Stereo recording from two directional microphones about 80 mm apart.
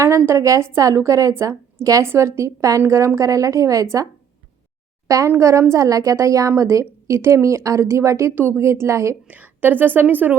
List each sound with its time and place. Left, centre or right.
0.0 s a woman's voice: right
9.2 s a woman's voice: centre